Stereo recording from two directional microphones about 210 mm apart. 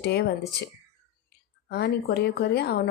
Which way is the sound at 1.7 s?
50° left (ahead or behind).